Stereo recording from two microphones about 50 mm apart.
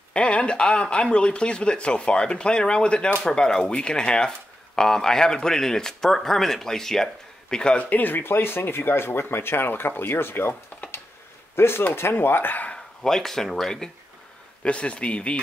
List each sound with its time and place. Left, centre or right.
0.1 s speech: left
7.7 s speech: left
11.5 s speech: left
13.0 s speech: centre
14.6 s speech: left